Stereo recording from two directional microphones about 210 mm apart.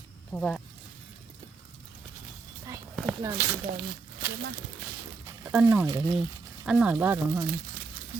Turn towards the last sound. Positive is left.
turn(degrees=-10)  # may be behind; listen again after turning